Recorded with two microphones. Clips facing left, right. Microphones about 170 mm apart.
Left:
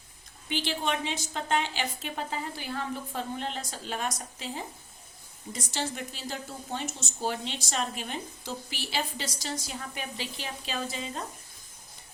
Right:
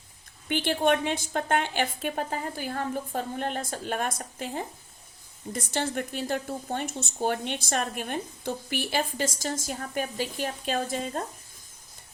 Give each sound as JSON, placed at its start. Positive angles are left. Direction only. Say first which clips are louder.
{"t": 0.4, "sound": "a woman's voice", "louder": "right 6 dB", "side_deg": -55}